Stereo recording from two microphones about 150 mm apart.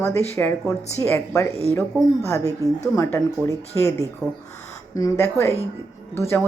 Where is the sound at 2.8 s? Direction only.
20° left (ahead or behind).